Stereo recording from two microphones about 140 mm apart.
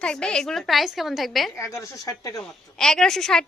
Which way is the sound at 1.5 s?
20° left (ahead or behind).